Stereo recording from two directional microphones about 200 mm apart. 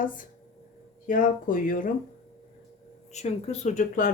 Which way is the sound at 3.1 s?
35° left (ahead or behind).